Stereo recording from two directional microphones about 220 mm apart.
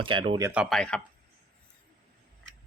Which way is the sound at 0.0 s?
20° right (ahead or behind).